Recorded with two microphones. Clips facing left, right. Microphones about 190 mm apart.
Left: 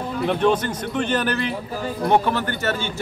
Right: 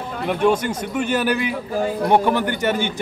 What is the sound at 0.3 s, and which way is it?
Speech, 10° right (ahead or behind).